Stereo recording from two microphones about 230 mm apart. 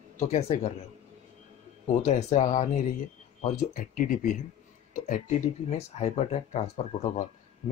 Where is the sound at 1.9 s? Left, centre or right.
Left.